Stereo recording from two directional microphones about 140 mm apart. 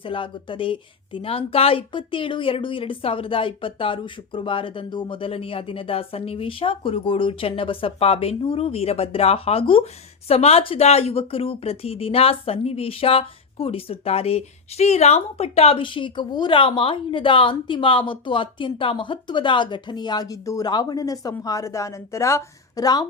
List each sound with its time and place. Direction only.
0.0 s speech: 40° left (ahead or behind)